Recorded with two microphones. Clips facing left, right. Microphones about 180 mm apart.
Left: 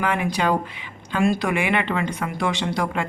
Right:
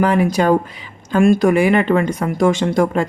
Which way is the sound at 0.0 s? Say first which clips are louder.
Right 8 dB; 40° right (ahead or behind).